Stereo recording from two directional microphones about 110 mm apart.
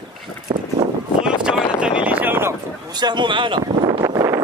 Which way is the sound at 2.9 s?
40° right (ahead or behind).